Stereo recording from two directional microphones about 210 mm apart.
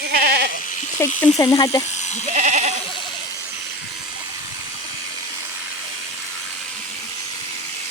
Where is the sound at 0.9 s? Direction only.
10° left (ahead or behind).